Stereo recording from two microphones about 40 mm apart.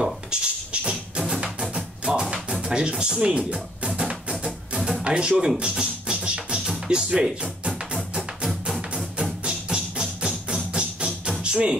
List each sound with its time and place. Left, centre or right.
0.0 s a sound: right
1.2 s music: centre
2.3 s music: right
5.0 s speech: right
5.6 s music: right
6.9 s speech: centre
7.9 s music: right